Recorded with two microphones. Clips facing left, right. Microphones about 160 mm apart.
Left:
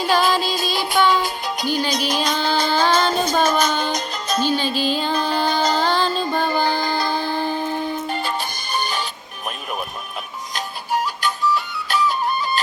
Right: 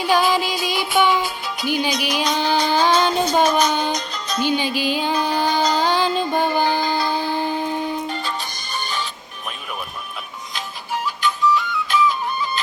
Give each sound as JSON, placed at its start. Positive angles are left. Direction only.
{"t": 0.0, "sound": "music", "side_deg": -15}
{"t": 1.9, "sound": "music", "side_deg": 45}
{"t": 2.3, "sound": "music", "side_deg": -15}
{"t": 3.9, "sound": "music", "side_deg": 45}
{"t": 4.4, "sound": "music", "side_deg": -15}
{"t": 8.7, "sound": "music", "side_deg": 45}
{"t": 10.5, "sound": "flute", "side_deg": 40}